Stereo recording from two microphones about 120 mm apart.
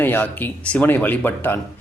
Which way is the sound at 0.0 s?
15° left (ahead or behind).